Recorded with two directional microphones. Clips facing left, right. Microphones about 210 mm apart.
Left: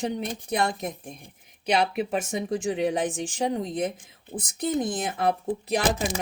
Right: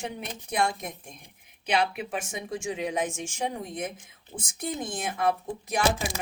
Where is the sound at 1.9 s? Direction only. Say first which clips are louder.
Left 6 dB; 35° left (ahead or behind).